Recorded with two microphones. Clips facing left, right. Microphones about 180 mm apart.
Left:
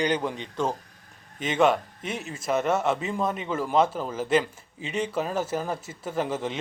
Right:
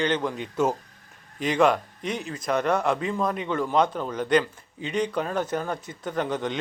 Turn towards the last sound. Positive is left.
turn(degrees=5)  # may be behind; listen again after turning